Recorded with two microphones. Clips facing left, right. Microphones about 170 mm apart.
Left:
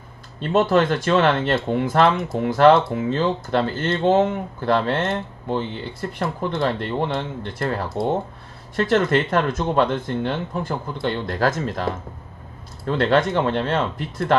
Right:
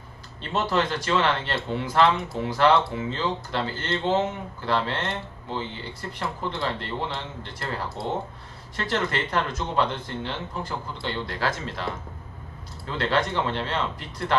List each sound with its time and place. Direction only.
0.4 s speech: 50° left (ahead or behind)